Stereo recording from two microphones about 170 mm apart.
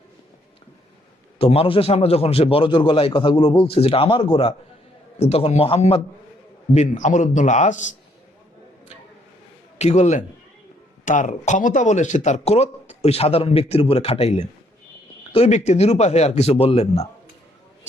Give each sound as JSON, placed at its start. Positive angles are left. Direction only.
{"t": 1.4, "sound": "speech", "side_deg": 35}
{"t": 6.7, "sound": "a man's voice", "side_deg": 45}
{"t": 9.7, "sound": "a man's voice", "side_deg": 40}